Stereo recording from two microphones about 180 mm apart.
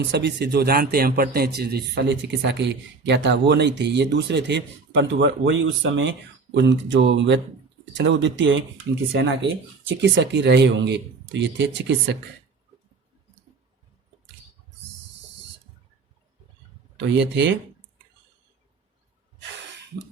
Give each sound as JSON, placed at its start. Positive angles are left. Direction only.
{"t": 0.1, "sound": "a man's voice", "side_deg": -70}
{"t": 17.2, "sound": "speech", "side_deg": -90}